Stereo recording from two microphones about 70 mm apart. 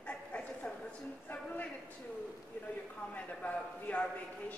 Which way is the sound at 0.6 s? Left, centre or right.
Centre.